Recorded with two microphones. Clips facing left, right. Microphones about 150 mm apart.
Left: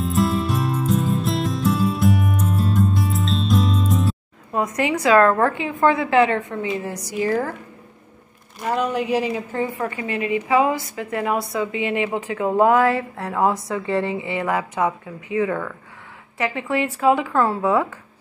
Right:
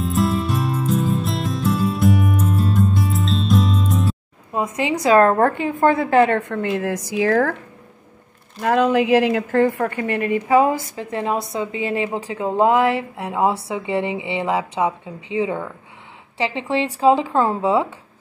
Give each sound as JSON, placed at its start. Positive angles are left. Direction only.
{"t": 0.0, "sound": "music", "side_deg": 0}
{"t": 4.7, "sound": "a woman's voice", "side_deg": -25}
{"t": 5.0, "sound": "a woman's voice", "side_deg": -40}
{"t": 8.6, "sound": "a woman's voice", "side_deg": -90}
{"t": 9.8, "sound": "a woman's voice", "side_deg": -55}
{"t": 11.0, "sound": "a woman's voice", "side_deg": -30}